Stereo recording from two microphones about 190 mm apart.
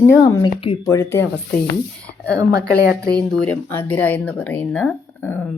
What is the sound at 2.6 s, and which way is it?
Speech, 55° left (ahead or behind).